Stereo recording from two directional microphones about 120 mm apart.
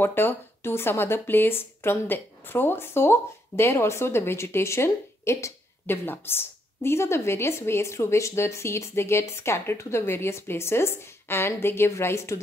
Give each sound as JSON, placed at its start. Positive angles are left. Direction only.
{"t": 0.0, "sound": "speech", "side_deg": 20}